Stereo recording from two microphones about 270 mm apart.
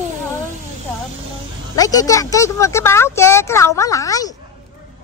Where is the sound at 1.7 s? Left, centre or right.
Centre.